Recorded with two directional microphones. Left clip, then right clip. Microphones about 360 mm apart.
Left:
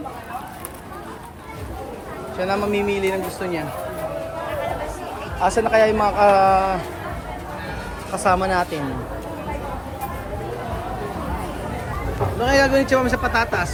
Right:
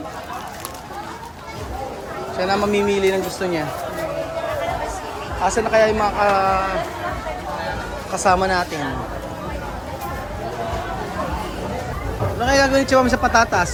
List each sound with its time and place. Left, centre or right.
2.4 s a man's voice: centre
5.4 s a man's voice: centre
8.1 s a man's voice: centre
12.4 s a man's voice: centre